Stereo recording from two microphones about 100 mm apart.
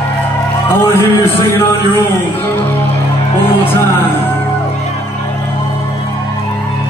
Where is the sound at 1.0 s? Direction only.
25° left (ahead or behind).